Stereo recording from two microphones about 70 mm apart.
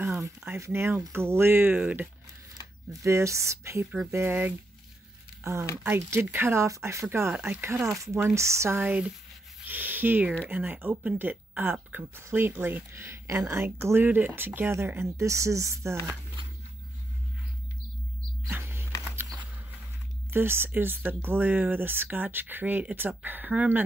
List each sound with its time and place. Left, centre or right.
0.6 s speech: right
1.8 s speech: centre
2.9 s speech: right
5.4 s speech: right
6.7 s speech: right
8.8 s speech: centre
12.2 s speech: right
18.5 s a sound: right
20.2 s speech: right